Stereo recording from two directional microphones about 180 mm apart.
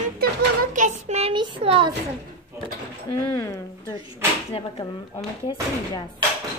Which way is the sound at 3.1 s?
15° left (ahead or behind).